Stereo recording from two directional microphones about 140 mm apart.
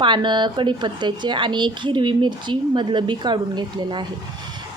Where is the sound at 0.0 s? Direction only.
35° right (ahead or behind).